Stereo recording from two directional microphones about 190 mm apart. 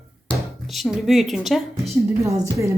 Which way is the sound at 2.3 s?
15° right (ahead or behind).